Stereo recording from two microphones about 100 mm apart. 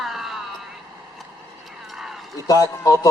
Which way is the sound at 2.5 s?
35° left (ahead or behind).